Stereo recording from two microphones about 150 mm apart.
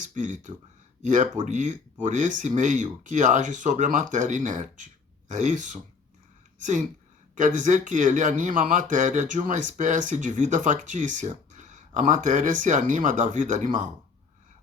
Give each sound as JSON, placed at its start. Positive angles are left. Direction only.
{"t": 0.0, "sound": "a woman's voice", "side_deg": -55}